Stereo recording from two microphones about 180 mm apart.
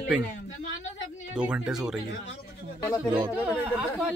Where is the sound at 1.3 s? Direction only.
5° right (ahead or behind).